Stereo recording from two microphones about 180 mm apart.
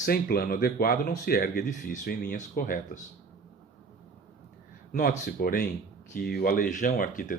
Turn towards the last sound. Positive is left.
turn(degrees=50)  # may be behind; listen again after turning